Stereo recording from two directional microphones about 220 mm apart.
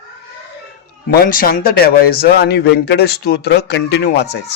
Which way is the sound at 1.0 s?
40° left (ahead or behind).